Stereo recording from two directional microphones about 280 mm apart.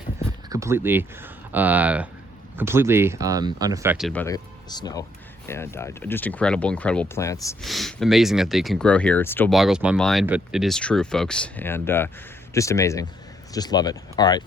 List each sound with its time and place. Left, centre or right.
0.5 s speech: centre
7.6 s speech: centre